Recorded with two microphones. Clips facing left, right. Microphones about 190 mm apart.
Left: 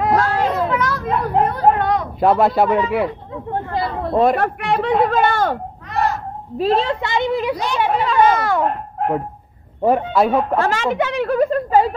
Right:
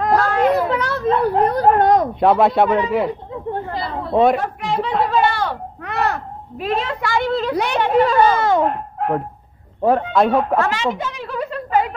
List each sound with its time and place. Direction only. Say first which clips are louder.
0.3 s children playing: right 3 dB; 30° left (ahead or behind)
0.7 s a child's voice: right 2 dB; 30° right (ahead or behind)
2.1 s speech: even; centre (ahead or behind)
4.1 s speech: right 1 dB; centre (ahead or behind)
4.4 s a man's voice: left 3 dB; 65° left (ahead or behind)
5.0 s a woman's voice: left 2 dB; 50° left (ahead or behind)
5.9 s a sound: left 1 dB; 65° right (ahead or behind)
6.6 s a woman's voice: left 4 dB; 30° left (ahead or behind); by 7.5 s 15° left (ahead or behind)
7.5 s a woman's voice: right 3 dB; 65° right (ahead or behind)
8.0 s speech: right 2 dB; 40° right (ahead or behind)
8.4 s a child's voice: right 3 dB; 20° right (ahead or behind)
9.8 s speech: even; 5° left (ahead or behind)
10.7 s a woman's voice: left 3 dB; 55° left (ahead or behind); by 11.9 s 40° left (ahead or behind)